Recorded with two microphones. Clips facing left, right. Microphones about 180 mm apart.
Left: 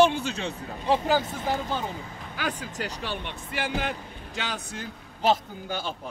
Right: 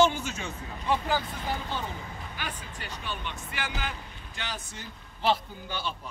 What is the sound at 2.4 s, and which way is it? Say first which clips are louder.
Speech: left 10 dB; 90° left.